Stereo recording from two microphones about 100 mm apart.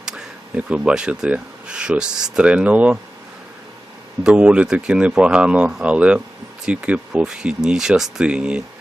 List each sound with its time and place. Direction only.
0.0 s speech: 10° right (ahead or behind)
4.2 s speech: 10° right (ahead or behind)